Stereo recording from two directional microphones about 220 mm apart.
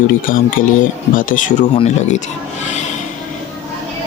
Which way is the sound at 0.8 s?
40° left (ahead or behind).